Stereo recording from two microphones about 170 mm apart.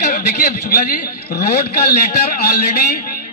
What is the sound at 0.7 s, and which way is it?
A man's voice, 65° left (ahead or behind).